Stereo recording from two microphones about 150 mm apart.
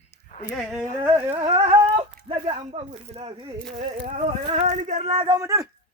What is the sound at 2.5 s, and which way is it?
Speech, 45° right (ahead or behind).